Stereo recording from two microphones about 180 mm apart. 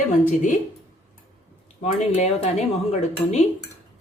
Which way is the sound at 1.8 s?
40° left (ahead or behind).